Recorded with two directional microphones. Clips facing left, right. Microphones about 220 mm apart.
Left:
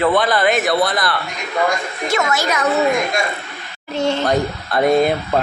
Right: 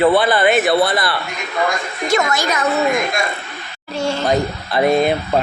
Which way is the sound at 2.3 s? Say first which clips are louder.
Even; 5° left (ahead or behind).